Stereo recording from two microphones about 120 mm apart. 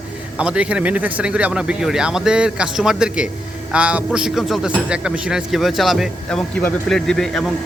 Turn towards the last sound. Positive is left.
turn(degrees=5)  # may be behind; listen again after turning